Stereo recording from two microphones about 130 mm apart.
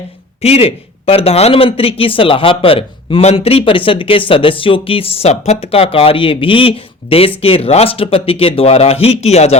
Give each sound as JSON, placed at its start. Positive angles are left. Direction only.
{"t": 0.4, "sound": "speech", "side_deg": 50}